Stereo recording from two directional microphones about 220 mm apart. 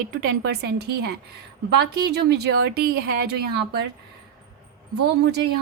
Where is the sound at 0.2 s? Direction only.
50° right (ahead or behind).